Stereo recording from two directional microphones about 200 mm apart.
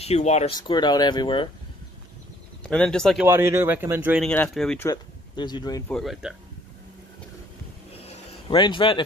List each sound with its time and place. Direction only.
0.0 s speech: 35° left (ahead or behind)
0.6 s speech: 20° left (ahead or behind)
2.6 s speech: 5° left (ahead or behind)
3.3 s a man's voice: 10° right (ahead or behind)
4.2 s speech: 5° left (ahead or behind)
4.8 s speech: 20° left (ahead or behind)
5.9 s speech: centre (ahead or behind)
7.9 s a sound: 30° left (ahead or behind)